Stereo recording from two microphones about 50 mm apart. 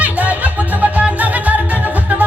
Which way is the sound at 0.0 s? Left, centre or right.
Right.